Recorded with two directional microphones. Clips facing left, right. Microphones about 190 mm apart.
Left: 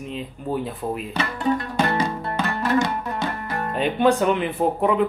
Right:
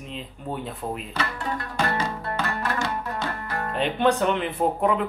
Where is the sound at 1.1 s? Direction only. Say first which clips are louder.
Left 6 dB; 15° left (ahead or behind).